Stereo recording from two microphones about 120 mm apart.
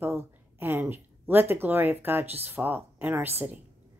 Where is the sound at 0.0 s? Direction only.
20° right (ahead or behind).